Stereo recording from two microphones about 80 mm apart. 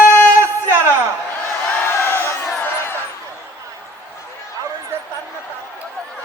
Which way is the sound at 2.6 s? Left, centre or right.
Left.